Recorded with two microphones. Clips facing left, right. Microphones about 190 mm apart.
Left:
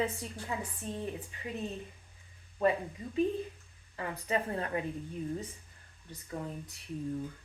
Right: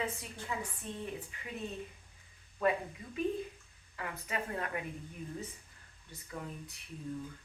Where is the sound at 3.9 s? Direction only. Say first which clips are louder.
Left 6 dB; 30° left (ahead or behind).